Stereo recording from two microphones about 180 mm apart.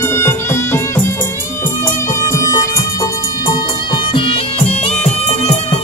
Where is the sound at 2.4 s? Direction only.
20° left (ahead or behind).